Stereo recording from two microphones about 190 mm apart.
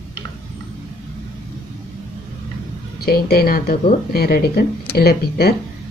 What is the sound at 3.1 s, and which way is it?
A woman's voice, 55° left (ahead or behind).